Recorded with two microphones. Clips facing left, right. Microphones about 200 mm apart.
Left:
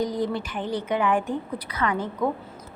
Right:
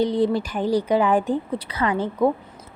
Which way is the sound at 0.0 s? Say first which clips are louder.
Right 6 dB; 30° right (ahead or behind).